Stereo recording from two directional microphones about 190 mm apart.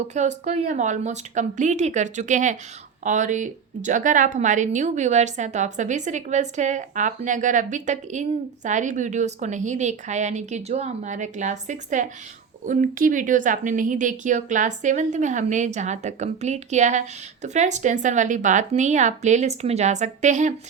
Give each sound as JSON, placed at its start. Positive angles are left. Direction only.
{"t": 0.1, "sound": "a woman's voice", "side_deg": -35}